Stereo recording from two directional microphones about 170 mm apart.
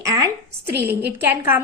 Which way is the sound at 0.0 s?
20° right (ahead or behind).